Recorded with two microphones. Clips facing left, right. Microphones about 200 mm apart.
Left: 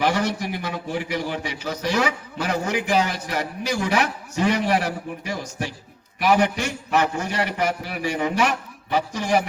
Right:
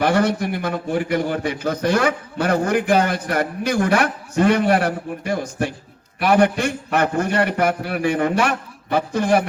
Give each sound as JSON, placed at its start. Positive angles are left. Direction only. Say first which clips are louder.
{"t": 0.0, "sound": "a man's voice", "louder": "right 5 dB", "side_deg": -55}